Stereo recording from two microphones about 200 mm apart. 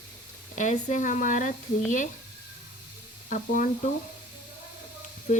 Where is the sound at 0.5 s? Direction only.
35° left (ahead or behind).